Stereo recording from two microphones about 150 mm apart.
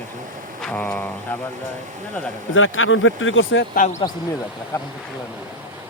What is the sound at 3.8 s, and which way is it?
Speech, 65° left (ahead or behind).